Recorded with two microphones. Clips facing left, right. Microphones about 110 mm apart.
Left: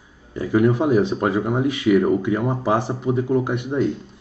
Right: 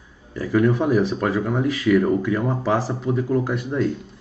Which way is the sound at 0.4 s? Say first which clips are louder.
Left 1 dB; 20° left (ahead or behind).